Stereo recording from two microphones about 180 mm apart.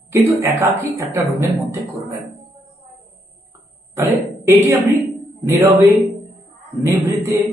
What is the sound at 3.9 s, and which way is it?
Speech, 15° right (ahead or behind).